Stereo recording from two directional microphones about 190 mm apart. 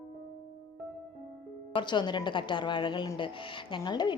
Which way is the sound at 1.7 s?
25° left (ahead or behind).